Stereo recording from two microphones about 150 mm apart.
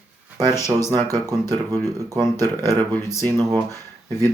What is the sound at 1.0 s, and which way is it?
Speech, 25° right (ahead or behind).